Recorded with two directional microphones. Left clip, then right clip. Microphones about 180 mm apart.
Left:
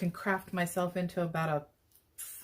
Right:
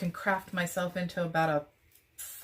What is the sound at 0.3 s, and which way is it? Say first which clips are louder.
Speech: right 3 dB; 45° left (ahead or behind).